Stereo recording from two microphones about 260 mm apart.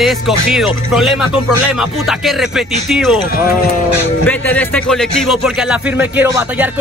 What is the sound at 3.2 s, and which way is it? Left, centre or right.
Speech, left.